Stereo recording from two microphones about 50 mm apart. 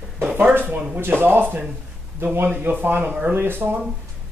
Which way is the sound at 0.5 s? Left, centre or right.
Right.